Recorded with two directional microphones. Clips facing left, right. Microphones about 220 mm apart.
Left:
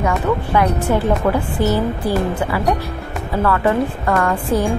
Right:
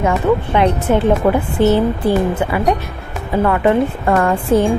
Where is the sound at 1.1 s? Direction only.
Centre (ahead or behind).